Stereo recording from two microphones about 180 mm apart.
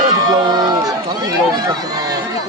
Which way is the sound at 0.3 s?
25° right (ahead or behind).